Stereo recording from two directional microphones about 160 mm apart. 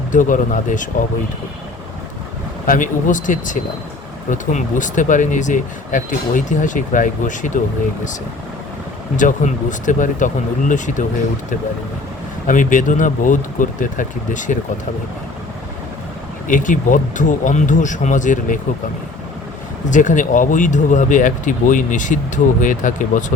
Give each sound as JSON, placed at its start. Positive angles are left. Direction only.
{"t": 0.1, "sound": "speech", "side_deg": 55}
{"t": 2.6, "sound": "speech", "side_deg": 55}
{"t": 9.1, "sound": "speech", "side_deg": 55}
{"t": 12.5, "sound": "speech", "side_deg": 55}
{"t": 16.5, "sound": "speech", "side_deg": 55}
{"t": 19.9, "sound": "speech", "side_deg": 55}